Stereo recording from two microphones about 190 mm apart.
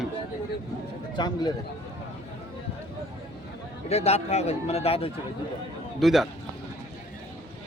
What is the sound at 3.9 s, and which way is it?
Speech, 35° left (ahead or behind).